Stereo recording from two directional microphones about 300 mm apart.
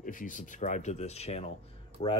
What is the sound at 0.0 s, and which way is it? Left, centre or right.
Speech, left.